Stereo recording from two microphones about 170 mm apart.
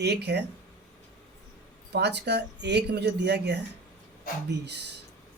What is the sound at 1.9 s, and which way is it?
Speech, 80° right.